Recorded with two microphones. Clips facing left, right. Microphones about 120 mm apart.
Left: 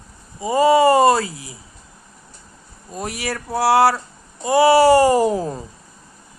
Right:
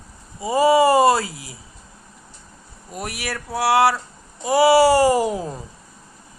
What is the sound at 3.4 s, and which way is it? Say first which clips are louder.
Speech: left 2 dB; 25° left (ahead or behind).